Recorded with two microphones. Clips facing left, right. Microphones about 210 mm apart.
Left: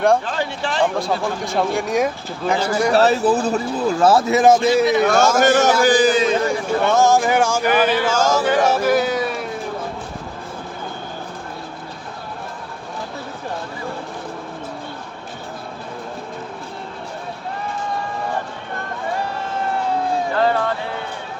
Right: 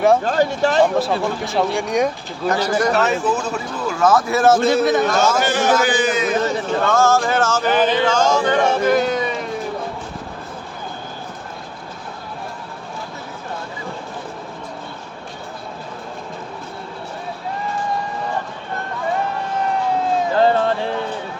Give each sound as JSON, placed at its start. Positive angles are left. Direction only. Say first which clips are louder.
{"t": 0.3, "sound": "speech", "louder": "right 7 dB", "side_deg": -45}
{"t": 0.9, "sound": "speech", "louder": "right 2 dB", "side_deg": 0}
{"t": 2.9, "sound": "speech", "louder": "left 3 dB", "side_deg": 35}
{"t": 5.4, "sound": "a man's voice", "louder": "left 3 dB", "side_deg": 45}
{"t": 6.4, "sound": "speech", "louder": "left 1 dB", "side_deg": 10}
{"t": 20.3, "sound": "a sound", "louder": "right 4 dB", "side_deg": -30}